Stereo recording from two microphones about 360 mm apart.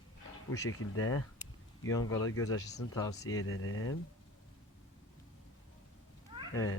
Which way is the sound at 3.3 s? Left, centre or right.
Left.